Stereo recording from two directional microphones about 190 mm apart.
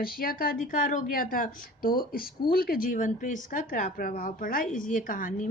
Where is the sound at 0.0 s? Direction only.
50° left (ahead or behind).